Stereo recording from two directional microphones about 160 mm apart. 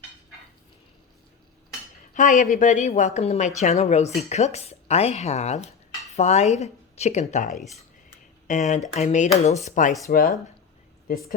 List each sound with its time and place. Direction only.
2.1 s a woman's voice: 50° left (ahead or behind)
7.5 s speech: centre (ahead or behind)
8.1 s a sound: 50° left (ahead or behind)
8.9 s a woman's voice: 45° left (ahead or behind)
10.1 s speech: 60° left (ahead or behind)